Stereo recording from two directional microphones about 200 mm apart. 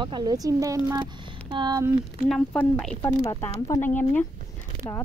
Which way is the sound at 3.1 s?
20° left (ahead or behind).